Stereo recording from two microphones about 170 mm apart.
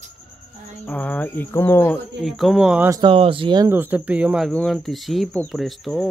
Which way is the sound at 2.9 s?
30° right (ahead or behind).